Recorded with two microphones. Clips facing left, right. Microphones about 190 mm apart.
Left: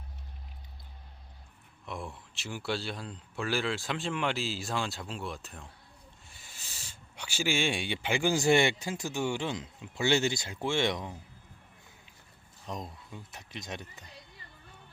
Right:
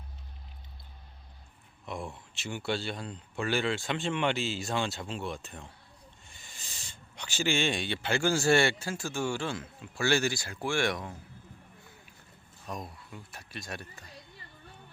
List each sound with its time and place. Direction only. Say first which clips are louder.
1.9 s speech: right 2 dB; centre (ahead or behind); by 11.2 s 20° left (ahead or behind)
12.6 s speech: even; 20° left (ahead or behind)